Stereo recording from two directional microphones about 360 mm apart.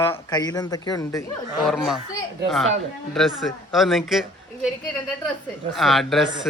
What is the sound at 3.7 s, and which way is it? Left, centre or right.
Speech, centre.